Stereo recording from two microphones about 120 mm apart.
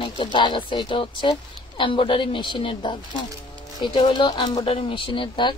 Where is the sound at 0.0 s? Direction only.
40° left (ahead or behind).